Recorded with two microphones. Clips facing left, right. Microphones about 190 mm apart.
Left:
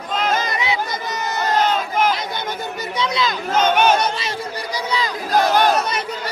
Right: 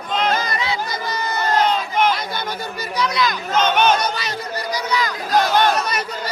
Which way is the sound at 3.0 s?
25° left (ahead or behind).